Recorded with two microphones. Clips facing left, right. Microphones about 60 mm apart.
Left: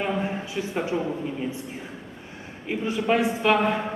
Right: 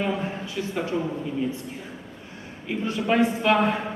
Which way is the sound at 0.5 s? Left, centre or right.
Centre.